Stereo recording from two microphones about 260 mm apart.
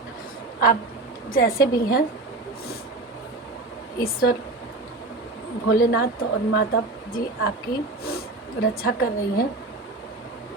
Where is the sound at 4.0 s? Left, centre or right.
Left.